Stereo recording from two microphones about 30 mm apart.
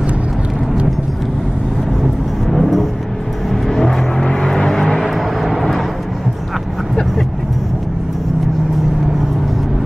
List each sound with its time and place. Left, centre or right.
2.5 s vehicle: centre
3.6 s vehicle: centre
4.9 s vehicle: centre